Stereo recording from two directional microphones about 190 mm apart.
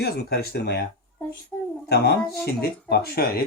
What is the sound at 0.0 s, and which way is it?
Speech, 55° left (ahead or behind).